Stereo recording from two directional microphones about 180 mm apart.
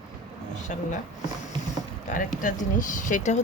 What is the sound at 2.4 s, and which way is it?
Speech, 45° left (ahead or behind).